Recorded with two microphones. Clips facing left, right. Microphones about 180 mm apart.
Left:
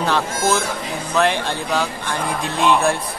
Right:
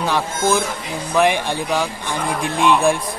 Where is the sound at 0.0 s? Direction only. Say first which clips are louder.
Even; 15° right (ahead or behind).